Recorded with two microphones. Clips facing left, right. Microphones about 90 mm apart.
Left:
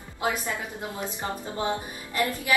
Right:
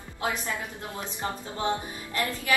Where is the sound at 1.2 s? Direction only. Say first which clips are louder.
Even; 20° left (ahead or behind).